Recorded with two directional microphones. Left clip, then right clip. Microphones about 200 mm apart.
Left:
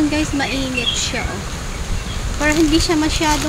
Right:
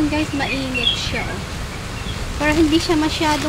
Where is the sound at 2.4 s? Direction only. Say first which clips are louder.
Left 1 dB; centre (ahead or behind).